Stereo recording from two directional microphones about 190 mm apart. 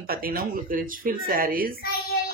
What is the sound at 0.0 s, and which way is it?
Speech, 50° right (ahead or behind).